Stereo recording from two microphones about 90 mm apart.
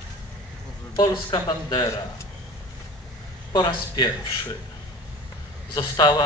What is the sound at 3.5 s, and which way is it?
Speech, 60° left (ahead or behind).